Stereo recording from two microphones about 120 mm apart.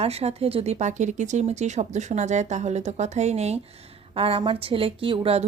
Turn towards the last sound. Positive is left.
turn(degrees=-55)  # may be behind; listen again after turning